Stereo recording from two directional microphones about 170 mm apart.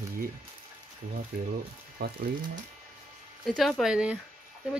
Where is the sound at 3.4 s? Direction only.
Centre (ahead or behind).